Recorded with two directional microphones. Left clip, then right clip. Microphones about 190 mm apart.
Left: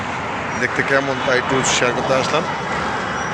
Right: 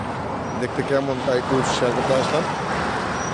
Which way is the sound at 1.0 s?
20° left (ahead or behind).